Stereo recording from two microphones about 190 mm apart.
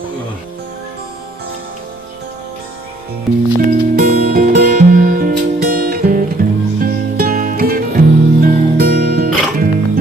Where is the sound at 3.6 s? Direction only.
50° right (ahead or behind).